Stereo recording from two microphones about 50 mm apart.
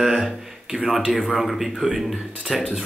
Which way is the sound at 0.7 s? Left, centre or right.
Left.